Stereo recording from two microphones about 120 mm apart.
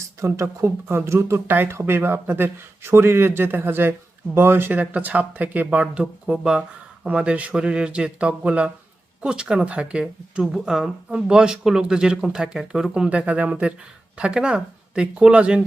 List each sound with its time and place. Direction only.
0.0 s speech: 25° right (ahead or behind)